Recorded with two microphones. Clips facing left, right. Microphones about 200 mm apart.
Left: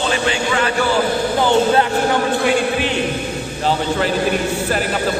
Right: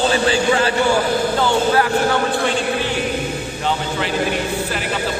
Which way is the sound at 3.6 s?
40° left (ahead or behind).